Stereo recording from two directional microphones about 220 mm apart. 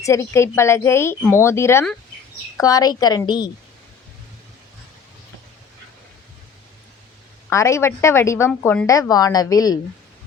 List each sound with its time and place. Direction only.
0.0 s a woman's voice: 15° left (ahead or behind)
7.5 s a woman's voice: 15° left (ahead or behind)